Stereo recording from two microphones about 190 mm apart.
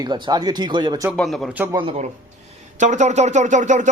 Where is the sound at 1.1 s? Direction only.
Centre (ahead or behind).